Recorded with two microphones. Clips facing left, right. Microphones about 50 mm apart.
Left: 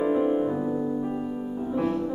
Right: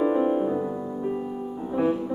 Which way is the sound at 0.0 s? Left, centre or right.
Centre.